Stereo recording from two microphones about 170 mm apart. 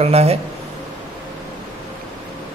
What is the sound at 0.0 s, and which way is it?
Speech, 35° right (ahead or behind).